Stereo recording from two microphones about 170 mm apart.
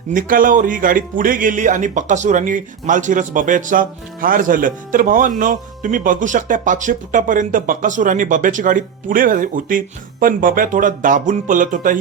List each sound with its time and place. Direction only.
0.1 s speech: 55° right (ahead or behind)